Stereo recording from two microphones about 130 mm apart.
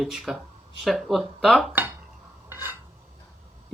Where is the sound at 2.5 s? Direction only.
15° right (ahead or behind).